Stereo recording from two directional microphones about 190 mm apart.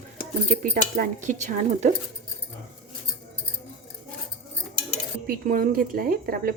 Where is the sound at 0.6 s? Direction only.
45° right (ahead or behind).